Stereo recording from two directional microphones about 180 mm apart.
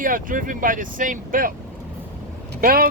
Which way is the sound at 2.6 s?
55° right (ahead or behind).